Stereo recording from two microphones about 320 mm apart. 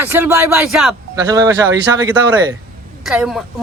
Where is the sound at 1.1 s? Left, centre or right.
Centre.